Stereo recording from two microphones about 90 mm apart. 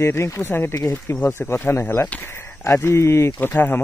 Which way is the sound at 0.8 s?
40° left (ahead or behind).